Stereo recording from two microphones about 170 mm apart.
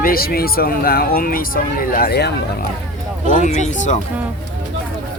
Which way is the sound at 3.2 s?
45° left (ahead or behind).